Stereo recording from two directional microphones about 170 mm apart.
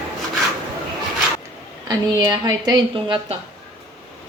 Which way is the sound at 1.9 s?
25° right (ahead or behind).